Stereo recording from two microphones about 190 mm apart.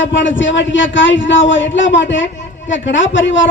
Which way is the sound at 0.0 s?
75° left (ahead or behind).